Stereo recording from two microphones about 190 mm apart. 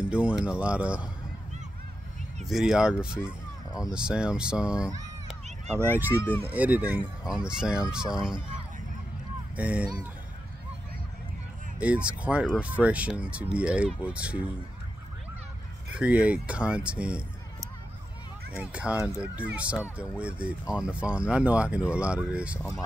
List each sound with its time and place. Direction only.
0.1 s a sound: 5° right (ahead or behind)
0.5 s speech: 5° right (ahead or behind)
2.4 s speech: centre (ahead or behind)
9.6 s speech: 5° right (ahead or behind)
11.8 s speech: 5° right (ahead or behind)
16.0 s speech: 5° right (ahead or behind)
18.6 s speech: 5° right (ahead or behind)
18.9 s speech: 15° left (ahead or behind)
19.3 s speech: 5° right (ahead or behind)